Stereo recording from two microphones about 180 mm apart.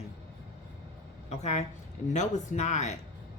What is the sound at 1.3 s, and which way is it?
Speech, 40° left (ahead or behind).